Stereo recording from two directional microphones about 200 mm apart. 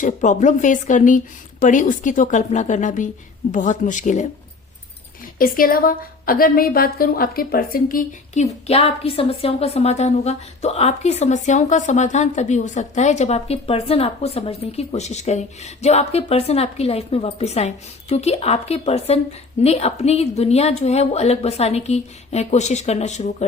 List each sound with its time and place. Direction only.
0.0 s a woman's voice: 40° left (ahead or behind)
5.4 s a woman's voice: 45° left (ahead or behind)